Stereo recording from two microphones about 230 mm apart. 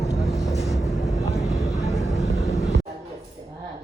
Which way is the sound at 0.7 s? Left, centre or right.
Centre.